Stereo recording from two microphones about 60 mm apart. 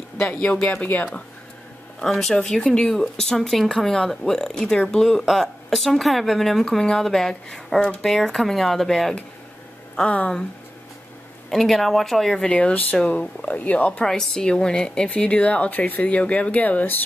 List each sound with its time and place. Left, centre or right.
0.2 s speech: centre
2.0 s speech: centre
5.2 s a woman's voice: centre
10.0 s speech: centre
11.5 s a woman's voice: centre
12.4 s speech: centre